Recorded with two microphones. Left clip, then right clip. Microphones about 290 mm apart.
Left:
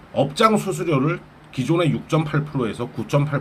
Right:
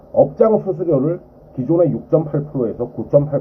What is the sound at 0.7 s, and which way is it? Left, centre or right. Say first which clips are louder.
Speech: right 4 dB; centre.